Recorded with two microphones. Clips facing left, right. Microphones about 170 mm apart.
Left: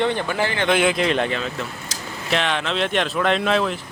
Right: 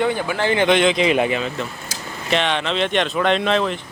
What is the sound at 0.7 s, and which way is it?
Speech, 5° left (ahead or behind).